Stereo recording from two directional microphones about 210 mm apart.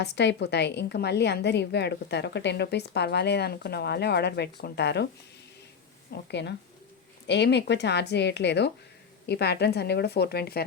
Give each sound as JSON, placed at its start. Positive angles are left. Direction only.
{"t": 0.0, "sound": "a woman's voice", "side_deg": 55}
{"t": 6.2, "sound": "a woman's voice", "side_deg": 55}